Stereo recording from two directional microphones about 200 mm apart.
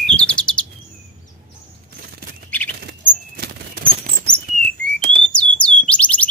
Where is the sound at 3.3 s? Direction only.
50° right (ahead or behind).